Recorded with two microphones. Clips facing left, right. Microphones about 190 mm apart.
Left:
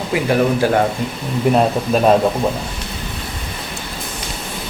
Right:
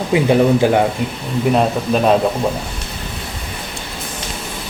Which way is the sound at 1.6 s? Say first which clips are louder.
Left 1 dB; centre (ahead or behind).